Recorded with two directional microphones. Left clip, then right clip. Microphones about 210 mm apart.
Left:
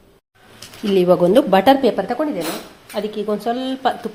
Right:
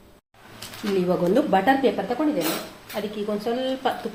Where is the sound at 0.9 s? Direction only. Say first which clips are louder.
Left 8 dB; 40° left (ahead or behind).